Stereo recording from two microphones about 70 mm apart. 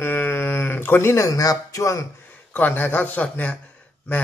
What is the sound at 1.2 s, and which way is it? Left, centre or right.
Speech, left.